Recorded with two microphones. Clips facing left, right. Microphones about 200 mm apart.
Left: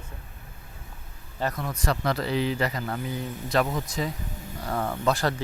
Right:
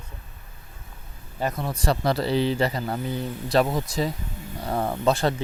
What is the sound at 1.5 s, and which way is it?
Speech, 30° right (ahead or behind).